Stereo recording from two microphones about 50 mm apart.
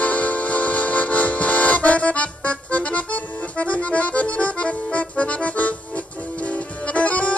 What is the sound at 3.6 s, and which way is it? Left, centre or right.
Accordion, left.